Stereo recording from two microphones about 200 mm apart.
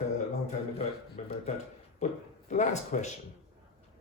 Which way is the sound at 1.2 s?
35° left (ahead or behind).